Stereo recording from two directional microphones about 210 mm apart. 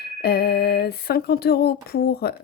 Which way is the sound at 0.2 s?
50° left (ahead or behind).